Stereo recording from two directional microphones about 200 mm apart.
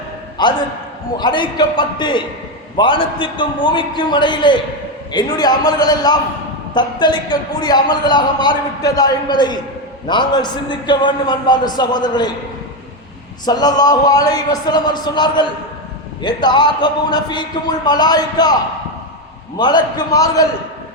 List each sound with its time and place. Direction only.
0.4 s a man's voice: 20° left (ahead or behind)
13.4 s a man's voice: 20° left (ahead or behind)
19.5 s a man's voice: 20° left (ahead or behind)